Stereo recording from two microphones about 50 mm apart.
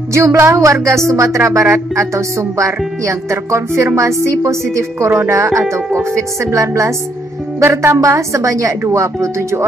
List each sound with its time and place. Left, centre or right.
0.1 s speech: right